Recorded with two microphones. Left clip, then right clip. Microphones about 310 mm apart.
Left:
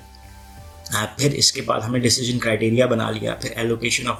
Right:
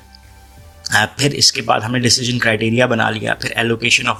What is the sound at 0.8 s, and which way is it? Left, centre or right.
Speech, right.